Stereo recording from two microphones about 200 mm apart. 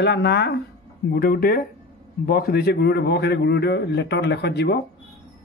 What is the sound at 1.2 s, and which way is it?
Speech, 45° left (ahead or behind).